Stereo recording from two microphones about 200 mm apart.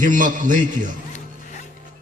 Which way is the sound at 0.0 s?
40° right (ahead or behind).